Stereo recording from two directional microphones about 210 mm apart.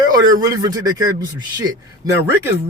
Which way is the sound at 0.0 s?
20° right (ahead or behind).